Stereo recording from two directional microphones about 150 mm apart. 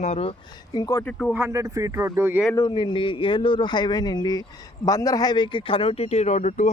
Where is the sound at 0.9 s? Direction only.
20° left (ahead or behind).